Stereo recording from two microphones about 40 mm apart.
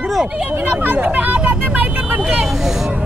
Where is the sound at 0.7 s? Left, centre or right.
Right.